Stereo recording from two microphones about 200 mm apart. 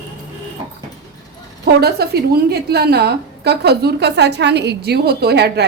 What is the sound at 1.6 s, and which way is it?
A woman's voice, 55° right (ahead or behind).